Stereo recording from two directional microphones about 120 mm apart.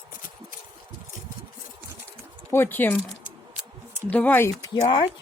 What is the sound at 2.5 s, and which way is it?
Speech, 20° left (ahead or behind).